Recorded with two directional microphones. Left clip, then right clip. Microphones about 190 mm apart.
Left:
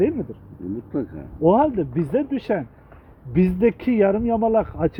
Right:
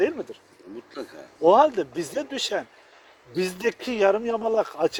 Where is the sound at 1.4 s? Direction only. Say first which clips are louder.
Even; 20° right (ahead or behind).